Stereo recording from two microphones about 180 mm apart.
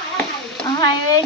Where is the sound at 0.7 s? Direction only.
25° left (ahead or behind).